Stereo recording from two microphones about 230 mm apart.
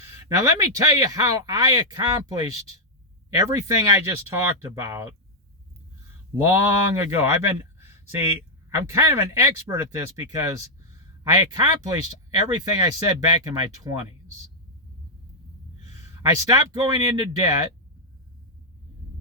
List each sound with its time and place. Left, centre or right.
0.1 s speech: centre
6.4 s speech: centre
11.6 s speech: centre
16.0 s speech: centre